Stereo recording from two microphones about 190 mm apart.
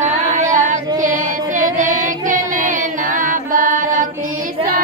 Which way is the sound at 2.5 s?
45° right (ahead or behind).